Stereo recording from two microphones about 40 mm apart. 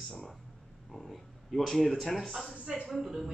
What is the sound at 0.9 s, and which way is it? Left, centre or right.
Speech, centre.